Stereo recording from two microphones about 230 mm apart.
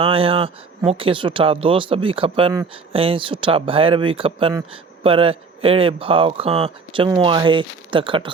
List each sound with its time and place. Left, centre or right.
0.0 s speech: right